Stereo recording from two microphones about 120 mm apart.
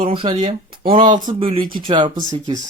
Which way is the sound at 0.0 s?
45° right (ahead or behind).